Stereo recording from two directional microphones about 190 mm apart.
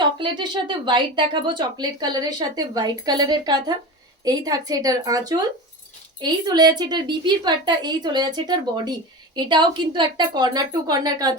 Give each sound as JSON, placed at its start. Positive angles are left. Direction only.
{"t": 0.2, "sound": "speech", "side_deg": -25}